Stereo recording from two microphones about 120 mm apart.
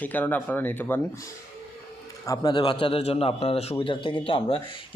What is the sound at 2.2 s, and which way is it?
Speech, 35° left (ahead or behind).